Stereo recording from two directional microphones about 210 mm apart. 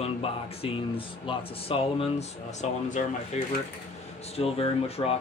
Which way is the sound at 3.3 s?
30° left (ahead or behind).